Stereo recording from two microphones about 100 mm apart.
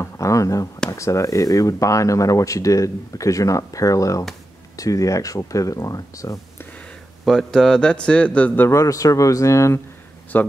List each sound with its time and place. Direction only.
0.0 s speech: 30° left (ahead or behind)
7.2 s speech: 5° left (ahead or behind); by 8.7 s 20° left (ahead or behind)
8.7 s speech: 35° left (ahead or behind)
10.3 s speech: 15° left (ahead or behind)